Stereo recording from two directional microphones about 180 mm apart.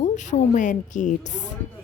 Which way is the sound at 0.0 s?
45° left (ahead or behind).